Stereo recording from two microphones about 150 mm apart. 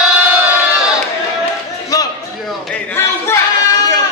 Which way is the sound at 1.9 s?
25° left (ahead or behind).